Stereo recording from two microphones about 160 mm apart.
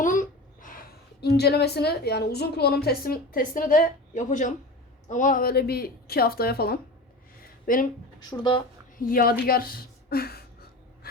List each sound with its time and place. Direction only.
0.0 s a woman's voice: 55° left (ahead or behind); by 6.7 s 75° left (ahead or behind)
7.7 s speech: 60° left (ahead or behind)
8.3 s speech: 30° left (ahead or behind)
9.0 s speech: 65° left (ahead or behind)
9.5 s a sound: 65° left (ahead or behind)